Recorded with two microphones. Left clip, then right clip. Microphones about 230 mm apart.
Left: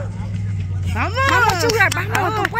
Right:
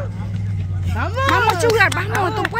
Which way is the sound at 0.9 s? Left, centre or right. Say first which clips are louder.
Left 2 dB; left.